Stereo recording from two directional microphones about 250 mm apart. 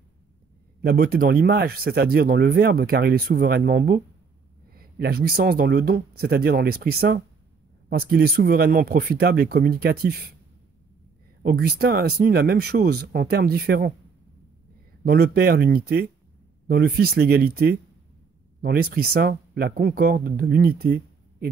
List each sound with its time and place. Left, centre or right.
0.7 s speech: right
11.4 s speech: right
15.0 s speech: right